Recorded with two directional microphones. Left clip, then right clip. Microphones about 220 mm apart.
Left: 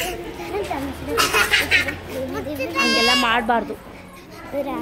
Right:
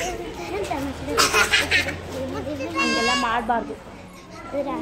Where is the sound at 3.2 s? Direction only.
55° left (ahead or behind).